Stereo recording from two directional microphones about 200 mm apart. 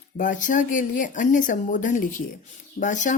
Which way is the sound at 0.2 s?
40° left (ahead or behind).